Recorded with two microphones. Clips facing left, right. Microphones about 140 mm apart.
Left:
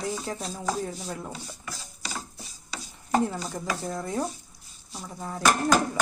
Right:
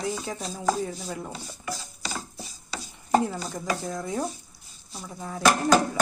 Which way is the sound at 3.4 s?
Centre (ahead or behind).